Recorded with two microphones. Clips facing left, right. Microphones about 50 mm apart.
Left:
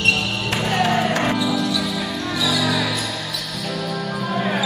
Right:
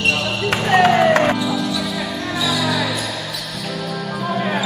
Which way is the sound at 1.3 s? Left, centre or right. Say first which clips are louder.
Even; centre.